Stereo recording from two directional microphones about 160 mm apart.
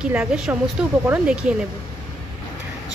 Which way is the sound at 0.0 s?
5° right (ahead or behind).